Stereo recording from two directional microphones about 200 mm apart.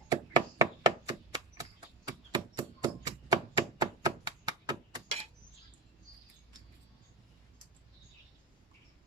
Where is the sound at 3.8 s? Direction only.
20° right (ahead or behind).